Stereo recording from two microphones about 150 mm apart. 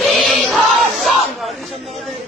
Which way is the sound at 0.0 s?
Centre (ahead or behind).